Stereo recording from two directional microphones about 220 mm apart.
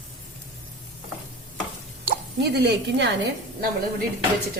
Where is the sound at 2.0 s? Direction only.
45° right (ahead or behind).